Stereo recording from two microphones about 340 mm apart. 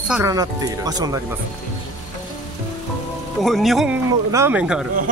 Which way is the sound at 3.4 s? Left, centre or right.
Centre.